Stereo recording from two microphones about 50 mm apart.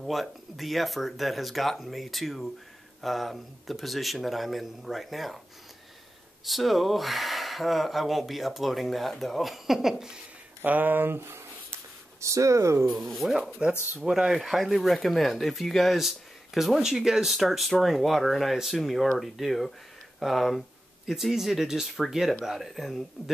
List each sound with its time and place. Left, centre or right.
0.0 s speech: centre
6.4 s speech: centre
10.6 s speech: right
12.2 s speech: right
12.9 s speech: centre
13.5 s speech: centre
14.3 s speech: centre